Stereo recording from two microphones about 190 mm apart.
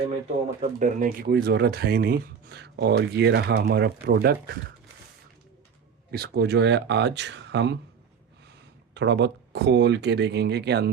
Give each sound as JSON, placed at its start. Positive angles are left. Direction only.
{"t": 0.6, "sound": "speech", "side_deg": -40}
{"t": 6.1, "sound": "speech", "side_deg": -55}
{"t": 9.0, "sound": "speech", "side_deg": -65}